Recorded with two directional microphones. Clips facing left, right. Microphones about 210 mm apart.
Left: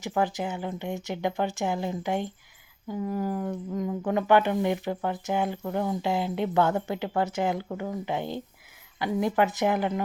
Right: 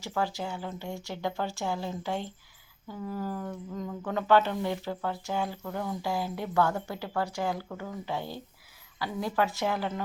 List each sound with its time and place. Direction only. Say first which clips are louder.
0.0 s speech: left 4 dB; 20° left (ahead or behind)